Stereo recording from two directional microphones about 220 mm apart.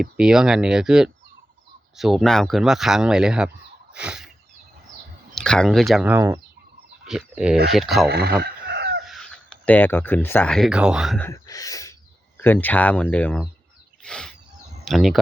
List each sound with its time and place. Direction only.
0.0 s speech: 5° right (ahead or behind)
3.9 s a sound: 5° right (ahead or behind)
5.3 s speech: 5° left (ahead or behind)
8.1 s chicken: 45° right (ahead or behind)
9.0 s speech: centre (ahead or behind)
11.3 s speech: 15° left (ahead or behind)
14.0 s a sound: 5° left (ahead or behind)
14.8 s speech: centre (ahead or behind)